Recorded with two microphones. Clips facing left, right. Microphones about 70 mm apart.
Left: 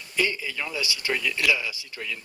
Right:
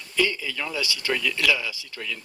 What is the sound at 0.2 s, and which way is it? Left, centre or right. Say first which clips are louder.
Speech: right 2 dB; left.